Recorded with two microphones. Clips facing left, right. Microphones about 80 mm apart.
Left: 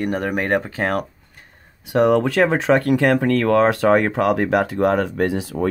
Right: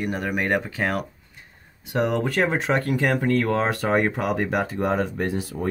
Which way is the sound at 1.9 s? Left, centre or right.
Left.